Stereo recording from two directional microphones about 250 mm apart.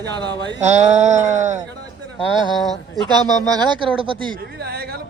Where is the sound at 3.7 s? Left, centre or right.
Centre.